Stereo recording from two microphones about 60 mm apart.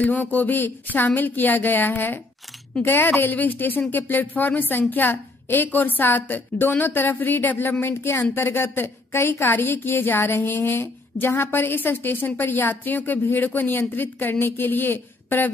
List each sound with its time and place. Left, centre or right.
0.0 s a woman's voice: left